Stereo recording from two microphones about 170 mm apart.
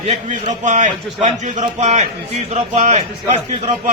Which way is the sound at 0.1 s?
45° right (ahead or behind).